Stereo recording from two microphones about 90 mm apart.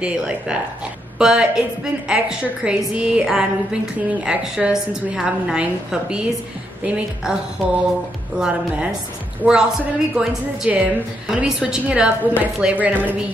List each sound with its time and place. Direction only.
0.0 s a woman's voice: 10° right (ahead or behind)